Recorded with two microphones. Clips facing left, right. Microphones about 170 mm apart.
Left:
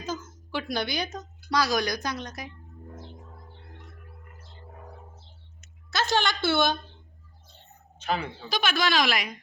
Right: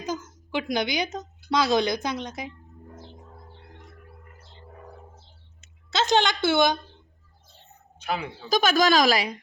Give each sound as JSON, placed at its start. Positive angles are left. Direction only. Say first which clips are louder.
{"t": 0.0, "sound": "a woman's voice", "louder": "right 3 dB", "side_deg": -15}
{"t": 5.9, "sound": "a woman's voice", "louder": "right 4 dB", "side_deg": -20}
{"t": 8.0, "sound": "speech", "louder": "even", "side_deg": -10}
{"t": 8.4, "sound": "a woman's voice", "louder": "right 7 dB", "side_deg": -45}